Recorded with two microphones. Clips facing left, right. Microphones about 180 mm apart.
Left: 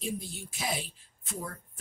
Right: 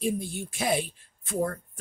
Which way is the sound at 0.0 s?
55° right (ahead or behind).